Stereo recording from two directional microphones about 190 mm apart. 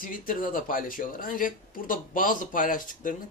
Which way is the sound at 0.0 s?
45° left (ahead or behind).